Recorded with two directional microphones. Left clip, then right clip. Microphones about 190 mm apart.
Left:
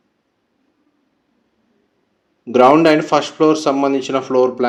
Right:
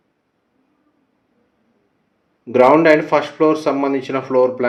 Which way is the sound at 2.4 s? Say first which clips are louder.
Left 1 dB; 30° left (ahead or behind).